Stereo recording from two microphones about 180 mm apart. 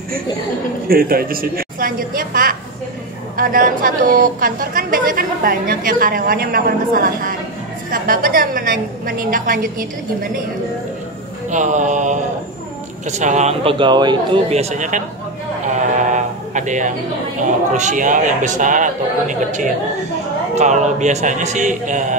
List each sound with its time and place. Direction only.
0.8 s a woman's voice: 55° right (ahead or behind)
11.5 s a woman's voice: 45° right (ahead or behind); by 14.4 s 25° right (ahead or behind)
14.5 s speech: 40° right (ahead or behind)
15.6 s a sound: 40° right (ahead or behind)
17.4 s a woman's voice: 45° right (ahead or behind)